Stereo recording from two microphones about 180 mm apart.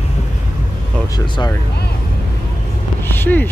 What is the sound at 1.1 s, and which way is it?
Vehicle, 25° left (ahead or behind).